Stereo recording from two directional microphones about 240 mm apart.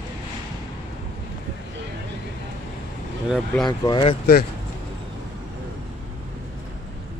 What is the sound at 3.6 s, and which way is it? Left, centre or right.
Speech, centre.